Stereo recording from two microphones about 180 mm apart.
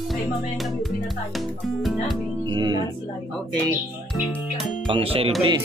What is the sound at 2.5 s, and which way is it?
Speech, 25° right (ahead or behind).